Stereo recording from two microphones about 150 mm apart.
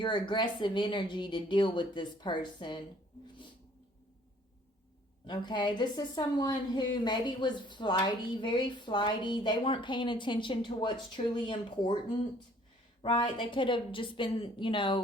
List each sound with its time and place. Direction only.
0.0 s a woman's voice: 30° left (ahead or behind)
5.2 s a woman's voice: 30° left (ahead or behind)
13.0 s a woman's voice: 30° left (ahead or behind)